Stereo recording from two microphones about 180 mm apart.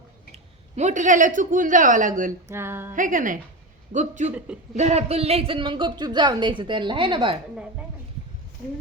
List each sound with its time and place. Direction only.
0.8 s a woman's voice: 45° right (ahead or behind)
2.5 s speech: 15° right (ahead or behind)
2.9 s a woman's voice: 45° right (ahead or behind)
4.4 s speech: 5° right (ahead or behind)
4.8 s a woman's voice: 35° right (ahead or behind)